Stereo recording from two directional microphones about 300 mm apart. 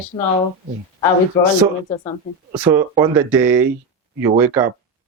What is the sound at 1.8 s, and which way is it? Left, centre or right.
Speech, centre.